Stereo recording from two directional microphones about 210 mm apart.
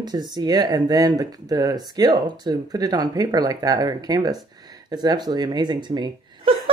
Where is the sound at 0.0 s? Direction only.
20° right (ahead or behind).